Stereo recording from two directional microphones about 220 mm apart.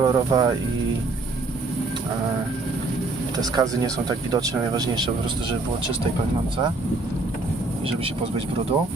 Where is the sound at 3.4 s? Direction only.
20° right (ahead or behind).